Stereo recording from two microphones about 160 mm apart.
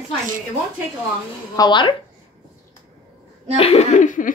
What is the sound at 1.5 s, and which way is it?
Speech, 25° left (ahead or behind).